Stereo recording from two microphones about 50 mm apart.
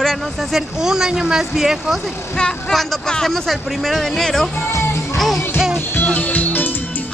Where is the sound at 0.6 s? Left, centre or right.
Centre.